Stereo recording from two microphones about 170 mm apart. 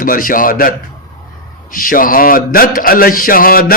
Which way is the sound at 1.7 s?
55° left (ahead or behind).